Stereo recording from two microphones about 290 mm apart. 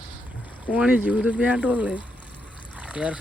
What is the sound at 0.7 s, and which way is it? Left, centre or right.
Speech, centre.